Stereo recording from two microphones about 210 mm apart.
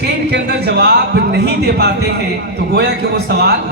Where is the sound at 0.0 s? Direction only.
50° right (ahead or behind).